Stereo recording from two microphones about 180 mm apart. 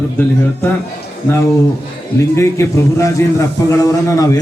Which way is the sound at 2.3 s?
15° left (ahead or behind).